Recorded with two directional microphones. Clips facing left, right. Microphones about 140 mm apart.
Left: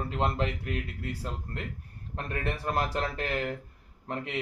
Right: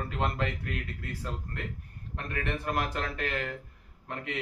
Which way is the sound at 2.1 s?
35° left (ahead or behind).